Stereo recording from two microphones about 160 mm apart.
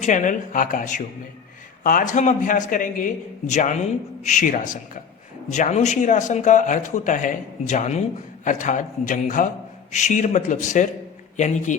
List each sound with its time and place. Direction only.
0.0 s a man's voice: 50° left (ahead or behind)